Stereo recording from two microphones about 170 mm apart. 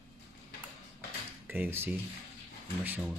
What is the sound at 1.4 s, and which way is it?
Speech, 10° right (ahead or behind).